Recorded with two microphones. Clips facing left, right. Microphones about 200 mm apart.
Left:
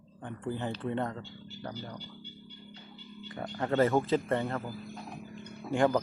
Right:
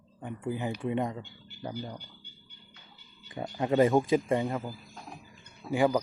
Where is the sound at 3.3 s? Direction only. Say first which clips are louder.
Right 3 dB; 15° right (ahead or behind).